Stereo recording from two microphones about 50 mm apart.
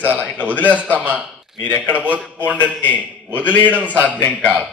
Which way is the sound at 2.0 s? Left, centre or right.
Right.